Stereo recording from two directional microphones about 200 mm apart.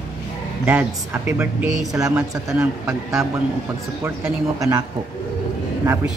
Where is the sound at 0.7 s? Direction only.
10° right (ahead or behind).